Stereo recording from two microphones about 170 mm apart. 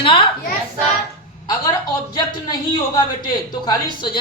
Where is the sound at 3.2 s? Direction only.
25° left (ahead or behind).